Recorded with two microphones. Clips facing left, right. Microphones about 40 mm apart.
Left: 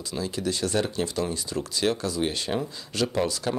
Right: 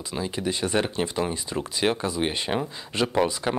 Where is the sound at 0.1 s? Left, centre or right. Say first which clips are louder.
Right 1 dB; right.